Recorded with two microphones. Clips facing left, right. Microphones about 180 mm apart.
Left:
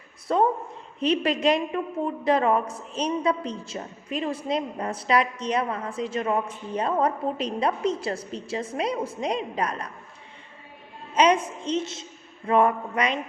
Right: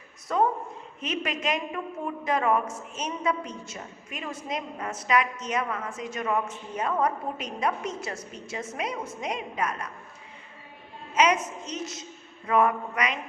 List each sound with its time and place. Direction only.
0.3 s a woman's voice: 30° left (ahead or behind)
11.1 s a woman's voice: 30° left (ahead or behind)